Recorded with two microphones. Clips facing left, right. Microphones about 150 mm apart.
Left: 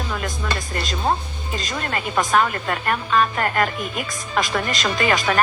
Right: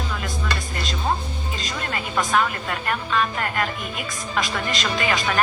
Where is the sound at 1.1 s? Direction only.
60° left (ahead or behind).